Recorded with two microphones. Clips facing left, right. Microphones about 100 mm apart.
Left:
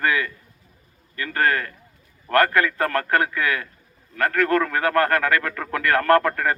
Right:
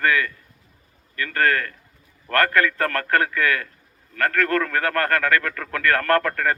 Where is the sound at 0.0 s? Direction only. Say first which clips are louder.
Right 1 dB; 15° left (ahead or behind).